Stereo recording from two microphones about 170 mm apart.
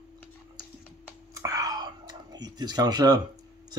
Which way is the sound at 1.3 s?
20° right (ahead or behind).